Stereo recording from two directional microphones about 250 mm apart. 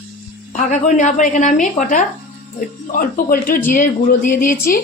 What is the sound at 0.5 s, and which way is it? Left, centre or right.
A woman's voice, left.